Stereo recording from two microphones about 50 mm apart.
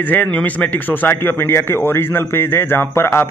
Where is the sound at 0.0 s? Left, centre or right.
Left.